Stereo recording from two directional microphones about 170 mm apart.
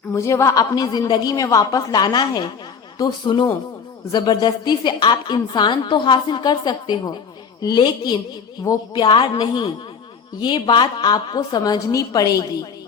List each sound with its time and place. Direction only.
0.1 s a woman's voice: 15° left (ahead or behind)